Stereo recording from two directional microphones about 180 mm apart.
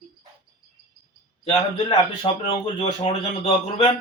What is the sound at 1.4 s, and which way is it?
A man's voice, 30° left (ahead or behind).